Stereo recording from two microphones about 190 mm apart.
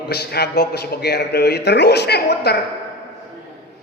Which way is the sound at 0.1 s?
60° left (ahead or behind).